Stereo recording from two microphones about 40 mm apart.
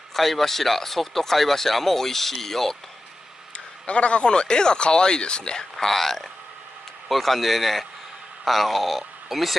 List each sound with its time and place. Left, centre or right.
0.1 s speech: centre
3.5 s a man's voice: left
5.9 s a man's voice: centre